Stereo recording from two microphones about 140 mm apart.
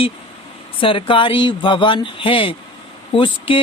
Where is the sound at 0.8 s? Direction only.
40° left (ahead or behind).